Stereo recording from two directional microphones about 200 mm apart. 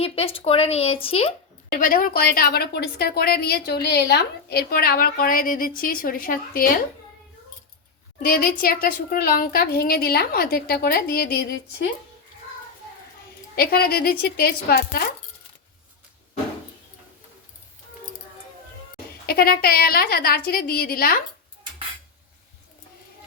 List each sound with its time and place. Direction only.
0.0 s speech: 30° left (ahead or behind)
1.8 s a woman's voice: 45° left (ahead or behind)
8.2 s a woman's voice: 50° left (ahead or behind)
13.6 s a woman's voice: 50° left (ahead or behind)
19.2 s a woman's voice: 50° left (ahead or behind)